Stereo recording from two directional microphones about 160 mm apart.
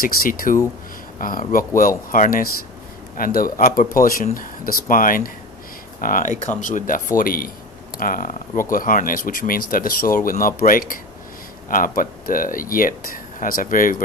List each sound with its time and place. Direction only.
0.0 s speech: 60° left (ahead or behind)